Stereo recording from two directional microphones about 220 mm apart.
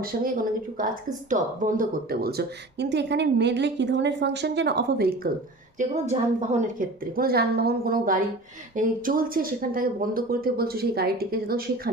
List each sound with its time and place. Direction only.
0.0 s speech: 40° right (ahead or behind)
5.8 s speech: 30° right (ahead or behind)